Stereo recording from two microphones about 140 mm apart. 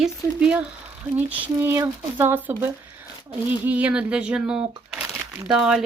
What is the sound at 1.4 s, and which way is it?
Speech, 15° right (ahead or behind).